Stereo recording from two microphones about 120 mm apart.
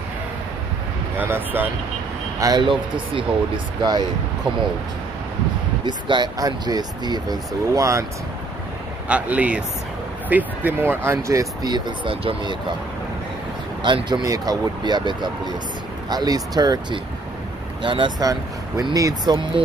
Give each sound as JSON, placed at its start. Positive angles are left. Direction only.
{"t": 1.1, "sound": "speech", "side_deg": -15}
{"t": 2.4, "sound": "speech", "side_deg": -40}
{"t": 3.5, "sound": "speech", "side_deg": -35}
{"t": 5.9, "sound": "speech", "side_deg": -40}
{"t": 9.1, "sound": "speech", "side_deg": -10}
{"t": 13.8, "sound": "speech", "side_deg": -40}
{"t": 18.2, "sound": "speech", "side_deg": -30}